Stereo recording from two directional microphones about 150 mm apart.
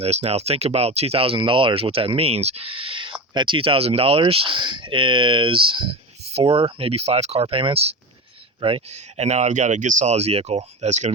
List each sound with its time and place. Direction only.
0.0 s speech: 45° right (ahead or behind)